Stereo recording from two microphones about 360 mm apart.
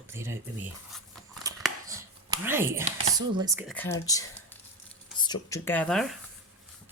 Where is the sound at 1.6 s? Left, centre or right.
Centre.